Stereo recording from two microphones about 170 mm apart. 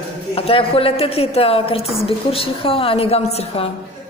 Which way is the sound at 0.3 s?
35° left (ahead or behind).